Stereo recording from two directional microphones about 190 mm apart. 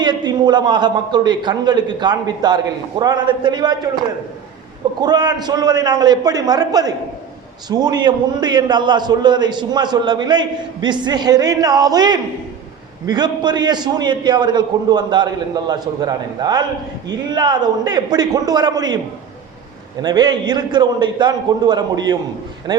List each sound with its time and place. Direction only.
0.0 s a man's voice: 20° right (ahead or behind)
4.9 s a man's voice: 20° right (ahead or behind)
20.0 s a man's voice: 20° right (ahead or behind)